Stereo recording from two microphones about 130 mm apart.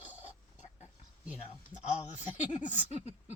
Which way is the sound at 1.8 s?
65° left (ahead or behind).